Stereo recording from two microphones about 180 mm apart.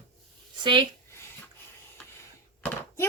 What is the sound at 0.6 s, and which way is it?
Speech, 25° right (ahead or behind).